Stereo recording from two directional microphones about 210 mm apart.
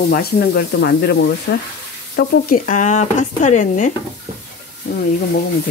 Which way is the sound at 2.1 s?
45° left (ahead or behind).